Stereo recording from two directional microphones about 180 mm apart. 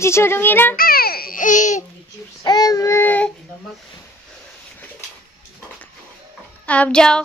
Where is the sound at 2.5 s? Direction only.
20° left (ahead or behind).